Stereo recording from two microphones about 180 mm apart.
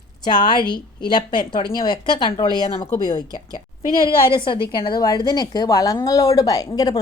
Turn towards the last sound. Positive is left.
turn(degrees=20)  # may be behind; listen again after turning